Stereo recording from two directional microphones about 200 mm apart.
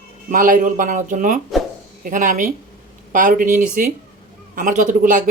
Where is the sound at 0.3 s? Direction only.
45° right (ahead or behind).